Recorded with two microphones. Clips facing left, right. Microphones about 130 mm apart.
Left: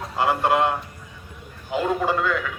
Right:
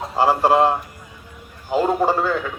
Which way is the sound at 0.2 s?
30° right (ahead or behind).